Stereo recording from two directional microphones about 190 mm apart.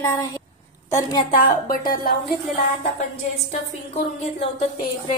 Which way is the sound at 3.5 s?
40° left (ahead or behind).